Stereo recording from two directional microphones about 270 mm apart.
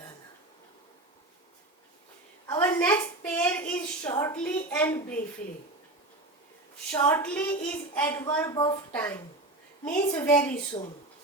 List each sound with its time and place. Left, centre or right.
2.6 s a sound: centre
4.1 s a child's voice: centre
6.9 s a child's voice: centre
10.7 s a child's voice: centre